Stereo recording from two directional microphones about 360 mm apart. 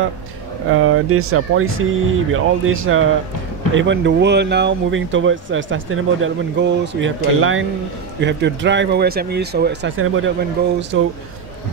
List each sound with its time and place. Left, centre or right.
0.7 s speech: right